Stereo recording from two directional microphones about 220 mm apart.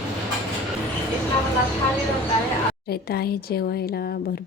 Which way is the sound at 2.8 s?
45° left (ahead or behind).